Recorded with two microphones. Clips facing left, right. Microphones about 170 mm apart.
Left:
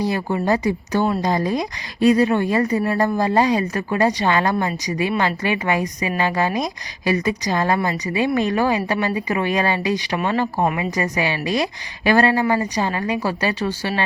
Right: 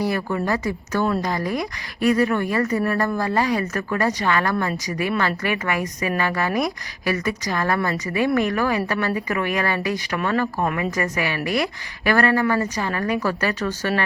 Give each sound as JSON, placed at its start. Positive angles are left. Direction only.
{"t": 0.0, "sound": "a woman's voice", "side_deg": 20}